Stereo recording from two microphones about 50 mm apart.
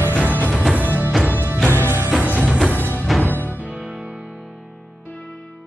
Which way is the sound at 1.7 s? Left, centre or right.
Left.